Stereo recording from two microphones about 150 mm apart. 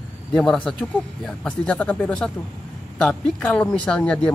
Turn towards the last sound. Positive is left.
turn(degrees=10)  # may be behind; listen again after turning